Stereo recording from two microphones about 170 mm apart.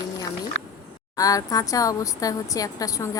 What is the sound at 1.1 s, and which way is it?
A woman's voice, 20° left (ahead or behind).